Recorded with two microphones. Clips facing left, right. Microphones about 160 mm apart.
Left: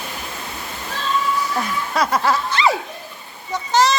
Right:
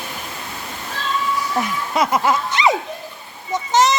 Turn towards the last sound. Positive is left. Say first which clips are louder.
# right 1 dB
turn(degrees=-20)  # may be behind; listen again after turning